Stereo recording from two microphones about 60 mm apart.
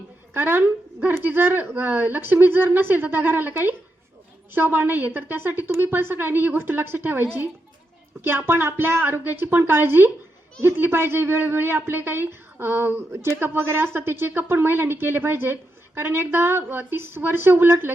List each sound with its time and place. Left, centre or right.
0.3 s a woman's voice: right